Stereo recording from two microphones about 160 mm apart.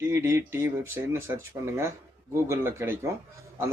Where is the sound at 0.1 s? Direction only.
15° right (ahead or behind).